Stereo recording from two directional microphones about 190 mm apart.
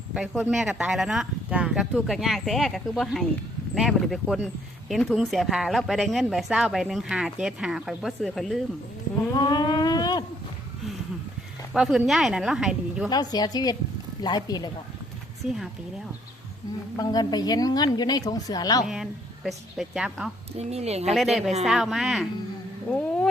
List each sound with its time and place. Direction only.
0.1 s speech: 5° right (ahead or behind)
9.3 s a sound: 20° left (ahead or behind)
11.7 s speech: centre (ahead or behind)
13.1 s a woman's voice: 20° left (ahead or behind)
17.0 s a woman's voice: 20° left (ahead or behind)
19.5 s speech: centre (ahead or behind)
20.6 s speech: 35° right (ahead or behind)
21.2 s speech: centre (ahead or behind)